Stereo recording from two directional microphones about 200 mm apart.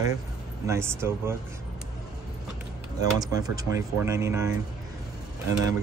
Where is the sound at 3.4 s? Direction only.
15° right (ahead or behind).